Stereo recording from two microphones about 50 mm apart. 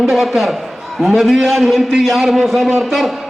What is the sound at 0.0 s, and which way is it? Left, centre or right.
A man's voice, centre.